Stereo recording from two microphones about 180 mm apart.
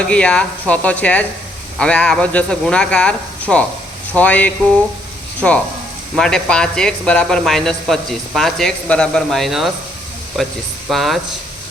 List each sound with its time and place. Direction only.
0.0 s speech: 5° left (ahead or behind)
0.7 s stir: 5° left (ahead or behind)
1.8 s speech: 5° left (ahead or behind)
4.1 s stir: 10° left (ahead or behind)
5.4 s speech: 5° left (ahead or behind)
10.8 s speech: centre (ahead or behind)